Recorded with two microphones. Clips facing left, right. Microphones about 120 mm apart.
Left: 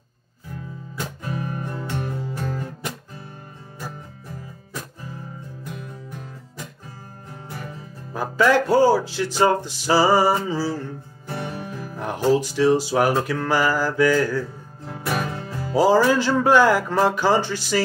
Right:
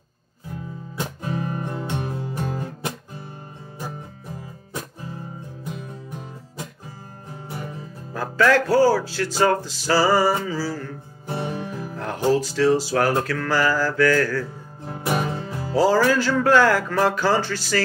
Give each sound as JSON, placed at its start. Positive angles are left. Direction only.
{"t": 0.9, "sound": "music", "side_deg": -25}
{"t": 7.4, "sound": "music", "side_deg": -15}
{"t": 8.1, "sound": "music", "side_deg": 15}
{"t": 11.2, "sound": "music", "side_deg": -20}
{"t": 11.9, "sound": "music", "side_deg": 15}
{"t": 12.3, "sound": "speech", "side_deg": 15}
{"t": 14.9, "sound": "music", "side_deg": -25}
{"t": 15.7, "sound": "speech", "side_deg": 15}